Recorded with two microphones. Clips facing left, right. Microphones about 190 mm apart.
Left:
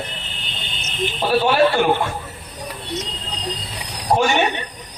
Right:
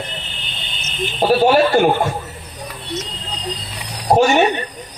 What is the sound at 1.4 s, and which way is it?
Speech, 40° right (ahead or behind).